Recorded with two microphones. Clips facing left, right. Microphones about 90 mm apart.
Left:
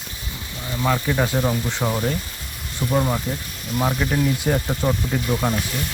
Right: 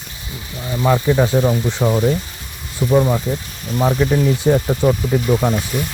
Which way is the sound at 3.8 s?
20° right (ahead or behind).